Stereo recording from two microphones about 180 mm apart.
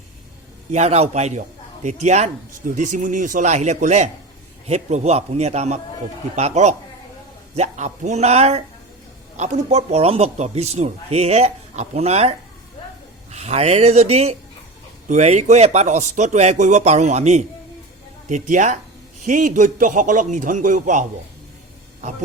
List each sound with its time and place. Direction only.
0.7 s a man's voice: 35° right (ahead or behind)
13.3 s a man's voice: 35° right (ahead or behind)